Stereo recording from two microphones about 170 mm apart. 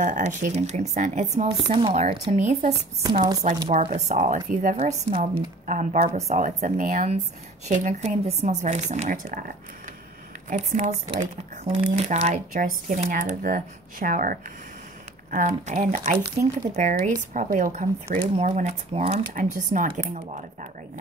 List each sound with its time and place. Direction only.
0.0 s speech: 45° right (ahead or behind)
1.6 s speech: 30° right (ahead or behind)
2.7 s speech: 25° right (ahead or behind)
3.8 s speech: 45° right (ahead or behind)
10.5 s speech: 45° right (ahead or behind)